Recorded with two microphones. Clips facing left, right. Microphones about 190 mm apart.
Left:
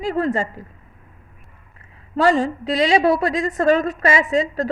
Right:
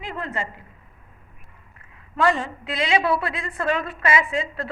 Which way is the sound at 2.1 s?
35° left (ahead or behind).